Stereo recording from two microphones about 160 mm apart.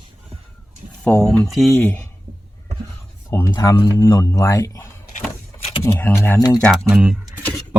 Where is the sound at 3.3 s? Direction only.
15° left (ahead or behind).